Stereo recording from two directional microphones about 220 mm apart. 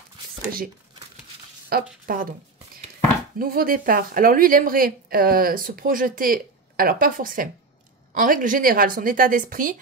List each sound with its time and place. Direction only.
1.7 s speech: 45° right (ahead or behind)
3.3 s speech: 40° right (ahead or behind)